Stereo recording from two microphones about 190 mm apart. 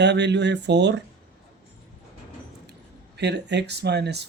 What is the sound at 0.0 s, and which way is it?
Speech, 65° right (ahead or behind).